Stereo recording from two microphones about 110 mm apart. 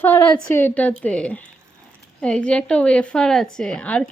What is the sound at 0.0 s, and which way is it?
A woman's voice, 15° left (ahead or behind).